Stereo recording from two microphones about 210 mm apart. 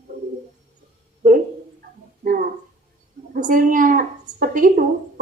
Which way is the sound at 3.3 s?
40° right (ahead or behind).